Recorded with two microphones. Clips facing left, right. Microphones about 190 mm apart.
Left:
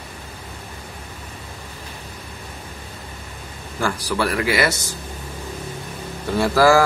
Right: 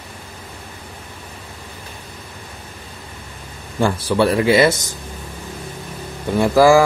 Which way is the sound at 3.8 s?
25° right (ahead or behind).